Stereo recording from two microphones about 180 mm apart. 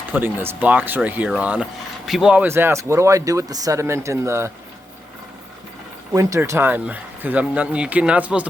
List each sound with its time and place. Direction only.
0.1 s speech: 10° right (ahead or behind)
6.1 s speech: 15° right (ahead or behind)